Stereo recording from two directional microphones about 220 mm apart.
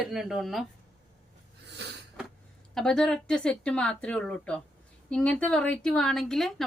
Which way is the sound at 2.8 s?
5° left (ahead or behind).